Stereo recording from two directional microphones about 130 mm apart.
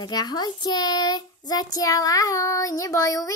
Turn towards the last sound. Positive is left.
turn(degrees=25)  # may be behind; listen again after turning